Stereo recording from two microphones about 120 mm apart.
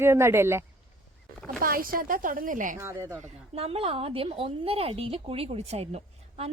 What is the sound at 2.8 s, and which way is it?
Speech, 20° right (ahead or behind).